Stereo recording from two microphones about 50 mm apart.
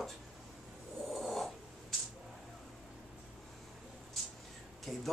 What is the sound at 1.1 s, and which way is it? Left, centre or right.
Snort, centre.